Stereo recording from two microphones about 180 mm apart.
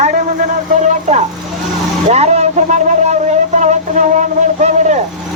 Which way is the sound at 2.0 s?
35° right (ahead or behind).